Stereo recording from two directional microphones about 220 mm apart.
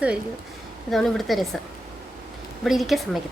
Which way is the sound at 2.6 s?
Centre (ahead or behind).